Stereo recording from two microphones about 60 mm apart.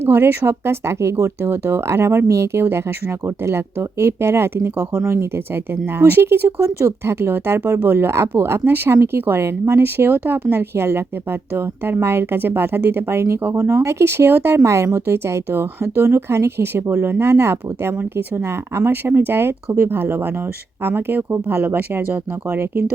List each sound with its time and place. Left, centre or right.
0.0 s speech: right
1.4 s speech: right
15.0 s speech: right